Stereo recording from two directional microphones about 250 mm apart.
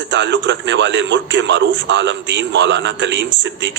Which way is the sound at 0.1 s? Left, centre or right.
Right.